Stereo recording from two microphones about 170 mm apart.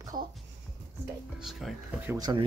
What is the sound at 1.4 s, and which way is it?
Speech, centre (ahead or behind).